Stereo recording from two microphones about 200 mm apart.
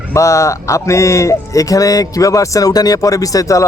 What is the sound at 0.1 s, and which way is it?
Speech, 15° left (ahead or behind).